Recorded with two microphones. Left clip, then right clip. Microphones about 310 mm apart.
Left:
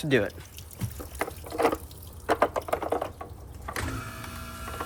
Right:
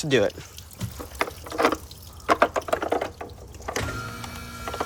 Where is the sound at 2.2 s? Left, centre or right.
Right.